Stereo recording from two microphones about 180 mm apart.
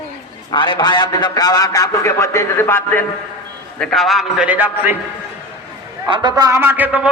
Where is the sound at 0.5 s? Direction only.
25° left (ahead or behind).